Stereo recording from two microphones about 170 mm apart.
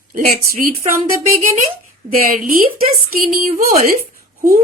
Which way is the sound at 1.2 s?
50° right (ahead or behind).